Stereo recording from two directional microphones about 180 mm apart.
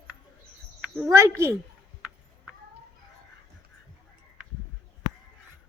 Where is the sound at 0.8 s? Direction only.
Centre (ahead or behind).